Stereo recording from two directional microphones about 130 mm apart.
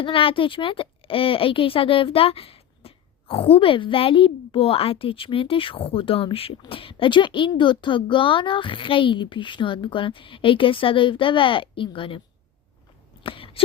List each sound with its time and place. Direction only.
0.0 s speech: 45° left (ahead or behind)
13.2 s whispering: 45° left (ahead or behind)